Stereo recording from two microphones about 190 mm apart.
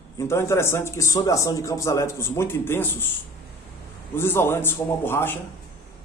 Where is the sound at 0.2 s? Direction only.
15° left (ahead or behind).